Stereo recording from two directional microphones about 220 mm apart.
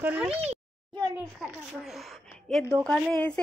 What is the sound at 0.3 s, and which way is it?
Speech, 25° right (ahead or behind).